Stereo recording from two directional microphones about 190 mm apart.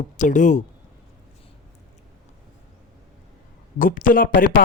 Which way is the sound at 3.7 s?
45° left (ahead or behind).